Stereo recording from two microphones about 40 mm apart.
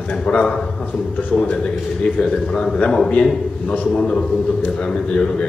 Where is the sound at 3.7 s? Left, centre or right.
Left.